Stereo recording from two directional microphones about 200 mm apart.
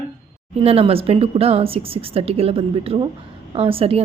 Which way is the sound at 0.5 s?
30° right (ahead or behind).